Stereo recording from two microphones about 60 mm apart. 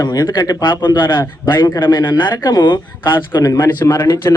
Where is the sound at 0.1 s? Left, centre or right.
Left.